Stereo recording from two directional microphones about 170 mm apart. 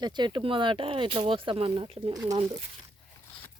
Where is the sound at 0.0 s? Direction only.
25° right (ahead or behind).